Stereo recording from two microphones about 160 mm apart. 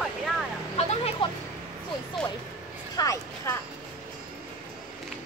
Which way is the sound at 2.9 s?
20° left (ahead or behind).